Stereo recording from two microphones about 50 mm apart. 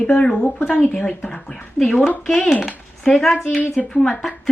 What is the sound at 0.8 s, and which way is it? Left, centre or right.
A woman's voice, left.